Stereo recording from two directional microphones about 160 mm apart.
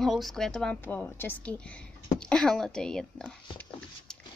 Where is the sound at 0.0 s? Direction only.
Centre (ahead or behind).